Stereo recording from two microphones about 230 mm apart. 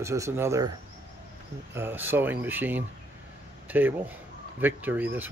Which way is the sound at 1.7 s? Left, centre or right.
Centre.